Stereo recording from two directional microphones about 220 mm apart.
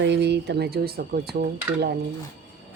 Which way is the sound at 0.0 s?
50° right (ahead or behind).